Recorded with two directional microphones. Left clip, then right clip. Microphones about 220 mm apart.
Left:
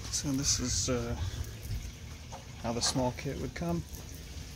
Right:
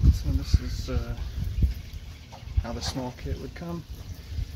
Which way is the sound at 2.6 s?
20° left (ahead or behind).